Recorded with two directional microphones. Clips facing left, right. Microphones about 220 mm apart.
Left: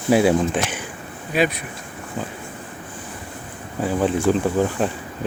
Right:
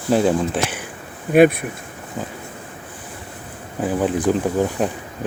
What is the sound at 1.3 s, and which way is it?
Speech, 55° right (ahead or behind).